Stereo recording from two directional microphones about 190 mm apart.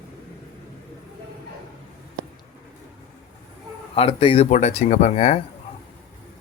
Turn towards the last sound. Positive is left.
turn(degrees=35)  # may be behind; listen again after turning